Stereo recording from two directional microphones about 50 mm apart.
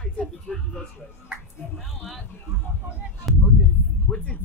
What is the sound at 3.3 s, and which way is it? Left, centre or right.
Speech, centre.